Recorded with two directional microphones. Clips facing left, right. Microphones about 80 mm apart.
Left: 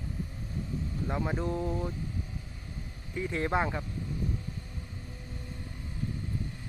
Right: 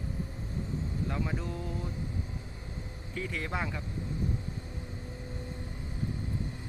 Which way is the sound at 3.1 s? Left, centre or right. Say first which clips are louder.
Left 6 dB; left.